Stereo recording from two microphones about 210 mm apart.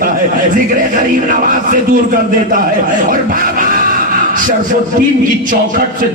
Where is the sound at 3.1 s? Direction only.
40° right (ahead or behind).